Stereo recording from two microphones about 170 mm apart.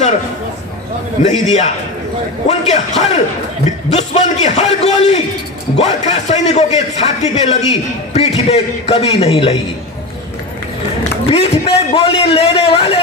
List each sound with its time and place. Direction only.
1.2 s a man's voice: 45° left (ahead or behind)
11.2 s a man's voice: 35° left (ahead or behind)